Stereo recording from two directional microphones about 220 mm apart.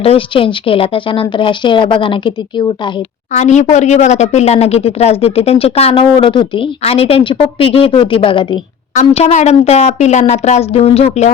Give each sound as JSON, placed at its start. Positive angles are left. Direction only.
{"t": 0.0, "sound": "speech", "side_deg": 25}
{"t": 3.3, "sound": "speech", "side_deg": 30}